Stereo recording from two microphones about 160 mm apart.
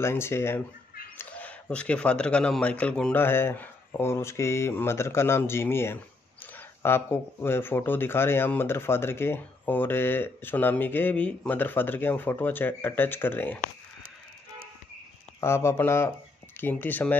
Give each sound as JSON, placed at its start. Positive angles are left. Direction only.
{"t": 0.0, "sound": "speech", "side_deg": 15}
{"t": 15.4, "sound": "speech", "side_deg": 15}